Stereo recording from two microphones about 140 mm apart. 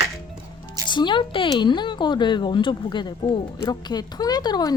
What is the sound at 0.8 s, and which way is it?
A woman's voice, 35° left (ahead or behind).